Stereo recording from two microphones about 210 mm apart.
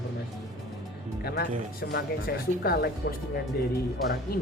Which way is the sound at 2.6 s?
45° left (ahead or behind).